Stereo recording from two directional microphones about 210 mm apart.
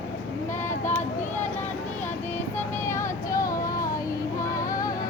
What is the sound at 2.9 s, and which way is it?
Female singing, 15° left (ahead or behind).